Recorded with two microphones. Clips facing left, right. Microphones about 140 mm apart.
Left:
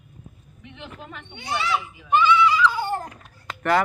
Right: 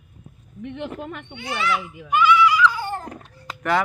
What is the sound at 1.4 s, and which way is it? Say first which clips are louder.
Speech: right 1 dB; 30° left (ahead or behind).